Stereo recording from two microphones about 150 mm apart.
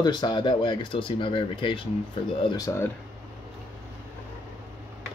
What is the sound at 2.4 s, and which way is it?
Speech, 25° left (ahead or behind).